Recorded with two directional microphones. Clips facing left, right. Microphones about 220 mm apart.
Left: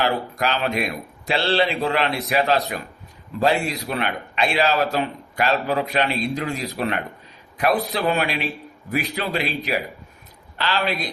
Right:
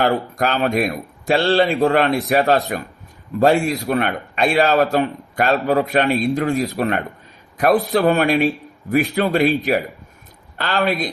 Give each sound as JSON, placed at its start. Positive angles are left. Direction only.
{"t": 0.0, "sound": "a man's voice", "side_deg": -45}